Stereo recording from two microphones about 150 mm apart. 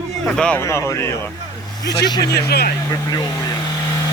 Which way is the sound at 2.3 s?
90° left.